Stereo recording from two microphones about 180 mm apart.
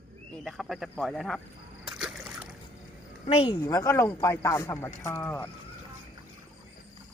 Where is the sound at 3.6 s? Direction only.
15° left (ahead or behind).